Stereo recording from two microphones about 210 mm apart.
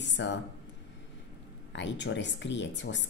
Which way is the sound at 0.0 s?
60° left (ahead or behind).